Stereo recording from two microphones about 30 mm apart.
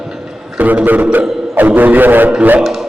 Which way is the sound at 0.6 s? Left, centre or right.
Right.